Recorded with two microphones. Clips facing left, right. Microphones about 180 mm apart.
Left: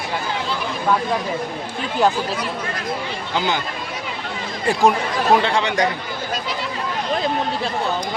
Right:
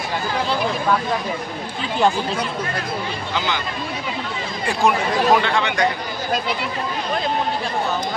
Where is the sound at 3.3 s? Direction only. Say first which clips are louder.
Left 3 dB; 45° left (ahead or behind).